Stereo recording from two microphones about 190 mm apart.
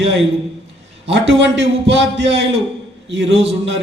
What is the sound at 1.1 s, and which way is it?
A man's voice, 70° right (ahead or behind).